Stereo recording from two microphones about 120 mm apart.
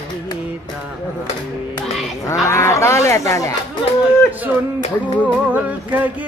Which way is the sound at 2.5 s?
25° left (ahead or behind).